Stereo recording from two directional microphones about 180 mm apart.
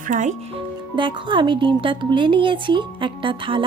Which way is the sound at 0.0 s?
45° right (ahead or behind).